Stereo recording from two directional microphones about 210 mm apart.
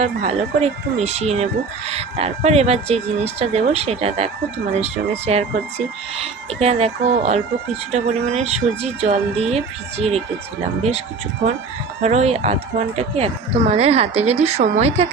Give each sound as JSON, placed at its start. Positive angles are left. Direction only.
{"t": 0.0, "sound": "speech", "side_deg": -30}
{"t": 12.0, "sound": "speech", "side_deg": -30}